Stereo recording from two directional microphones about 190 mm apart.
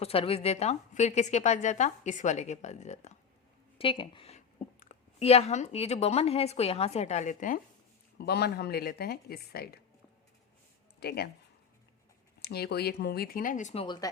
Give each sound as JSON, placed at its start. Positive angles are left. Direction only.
{"t": 0.0, "sound": "a woman's voice", "side_deg": 30}
{"t": 8.2, "sound": "speech", "side_deg": 60}
{"t": 11.0, "sound": "speech", "side_deg": 55}
{"t": 12.4, "sound": "speech", "side_deg": 55}
{"t": 13.8, "sound": "speech", "side_deg": 20}